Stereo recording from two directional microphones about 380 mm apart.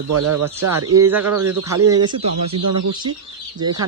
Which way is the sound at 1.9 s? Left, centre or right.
Centre.